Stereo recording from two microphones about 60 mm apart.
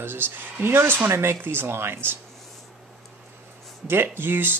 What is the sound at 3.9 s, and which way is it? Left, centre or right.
Speech, right.